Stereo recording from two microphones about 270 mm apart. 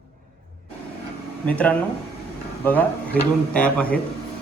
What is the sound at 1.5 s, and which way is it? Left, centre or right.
A man's voice, centre.